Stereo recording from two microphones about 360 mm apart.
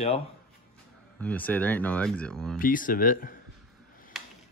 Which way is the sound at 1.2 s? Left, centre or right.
Centre.